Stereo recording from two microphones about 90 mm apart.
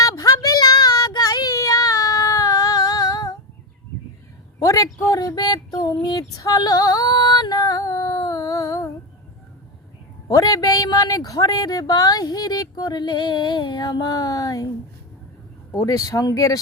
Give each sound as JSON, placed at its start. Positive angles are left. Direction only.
{"t": 0.0, "sound": "child singing", "side_deg": 40}
{"t": 4.6, "sound": "a sound", "side_deg": 40}
{"t": 10.3, "sound": "speech", "side_deg": 40}
{"t": 15.7, "sound": "speech", "side_deg": 35}